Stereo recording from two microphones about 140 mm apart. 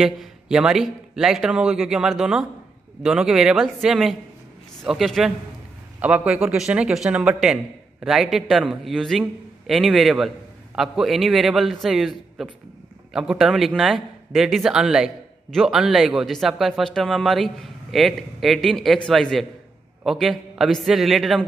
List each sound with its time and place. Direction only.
0.0 s a man's voice: 5° right (ahead or behind)